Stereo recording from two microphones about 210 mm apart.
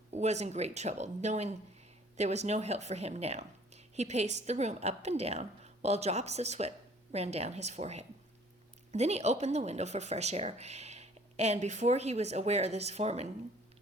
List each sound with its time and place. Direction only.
0.1 s speech: 30° right (ahead or behind)